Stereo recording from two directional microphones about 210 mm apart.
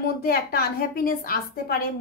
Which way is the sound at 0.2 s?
45° left (ahead or behind).